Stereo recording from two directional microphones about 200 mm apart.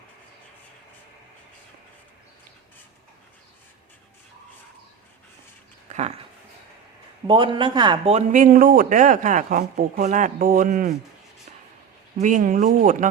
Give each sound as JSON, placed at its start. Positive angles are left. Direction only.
{"t": 5.9, "sound": "dog", "side_deg": -35}
{"t": 7.3, "sound": "speech", "side_deg": -25}
{"t": 12.2, "sound": "speech", "side_deg": -40}